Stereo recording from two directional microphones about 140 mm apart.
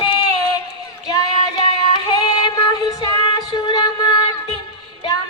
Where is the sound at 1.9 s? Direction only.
30° left (ahead or behind).